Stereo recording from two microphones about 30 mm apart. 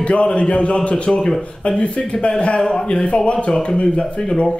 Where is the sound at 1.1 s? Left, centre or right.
Left.